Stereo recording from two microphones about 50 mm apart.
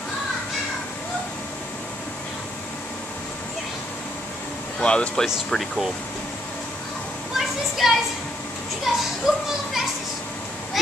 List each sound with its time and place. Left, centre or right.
4.7 s speech: left
5.2 s speech: centre
7.3 s a sound: centre
8.9 s speech: centre